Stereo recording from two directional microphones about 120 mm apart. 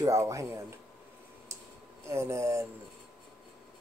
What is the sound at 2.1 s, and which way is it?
Speech, 25° right (ahead or behind).